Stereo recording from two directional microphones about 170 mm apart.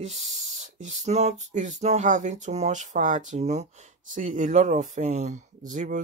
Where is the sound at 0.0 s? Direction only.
40° right (ahead or behind).